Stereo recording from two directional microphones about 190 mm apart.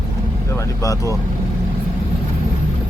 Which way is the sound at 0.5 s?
15° left (ahead or behind).